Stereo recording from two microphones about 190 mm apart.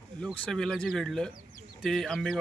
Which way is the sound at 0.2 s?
5° left (ahead or behind).